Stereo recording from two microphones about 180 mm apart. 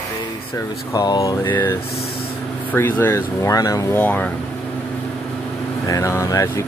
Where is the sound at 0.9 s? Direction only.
20° left (ahead or behind).